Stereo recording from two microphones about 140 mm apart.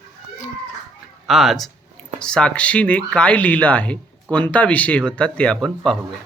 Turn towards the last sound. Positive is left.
turn(degrees=5)  # may be behind; listen again after turning